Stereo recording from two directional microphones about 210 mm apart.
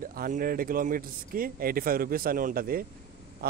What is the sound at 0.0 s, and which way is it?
Speech, 40° right (ahead or behind).